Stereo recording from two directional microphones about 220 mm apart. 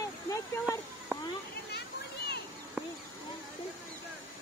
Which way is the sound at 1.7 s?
45° left (ahead or behind).